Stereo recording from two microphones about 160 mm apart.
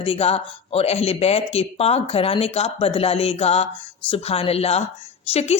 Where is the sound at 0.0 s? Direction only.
35° left (ahead or behind).